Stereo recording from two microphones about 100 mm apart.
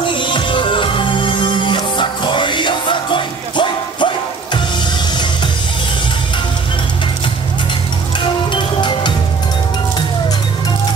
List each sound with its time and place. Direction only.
0.0 s music: 55° left (ahead or behind)
8.5 s music: 55° left (ahead or behind)